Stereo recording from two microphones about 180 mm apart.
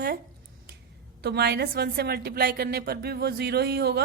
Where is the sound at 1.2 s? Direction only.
65° right (ahead or behind).